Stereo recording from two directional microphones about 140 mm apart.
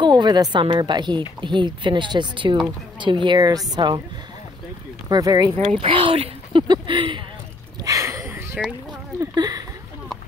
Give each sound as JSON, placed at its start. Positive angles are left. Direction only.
{"t": 0.0, "sound": "a woman's voice", "side_deg": -30}
{"t": 5.1, "sound": "speech", "side_deg": -30}
{"t": 5.6, "sound": "a woman's voice", "side_deg": -45}
{"t": 7.8, "sound": "a sound", "side_deg": -20}
{"t": 9.2, "sound": "speech", "side_deg": -25}